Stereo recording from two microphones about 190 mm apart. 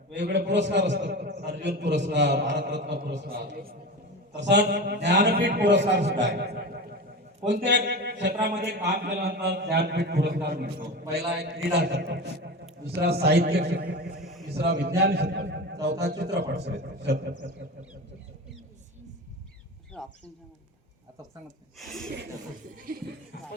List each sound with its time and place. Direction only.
0.1 s a man's voice: 65° right (ahead or behind)
4.4 s a man's voice: 65° right (ahead or behind)
21.8 s speech: centre (ahead or behind)